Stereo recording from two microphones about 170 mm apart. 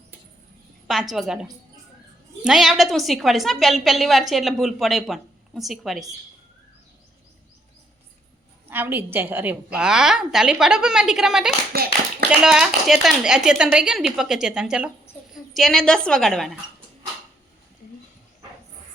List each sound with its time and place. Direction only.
1.1 s a woman's voice: 5° right (ahead or behind)
8.7 s a woman's voice: 10° right (ahead or behind)
11.7 s speech: 65° right (ahead or behind)
12.3 s a woman's voice: 5° right (ahead or behind)